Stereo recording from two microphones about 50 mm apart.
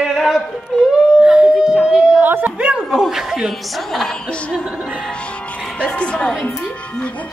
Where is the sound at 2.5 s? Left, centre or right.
Centre.